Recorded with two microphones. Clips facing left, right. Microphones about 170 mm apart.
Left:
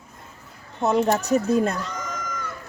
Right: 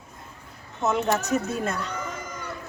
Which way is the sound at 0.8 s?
35° left (ahead or behind).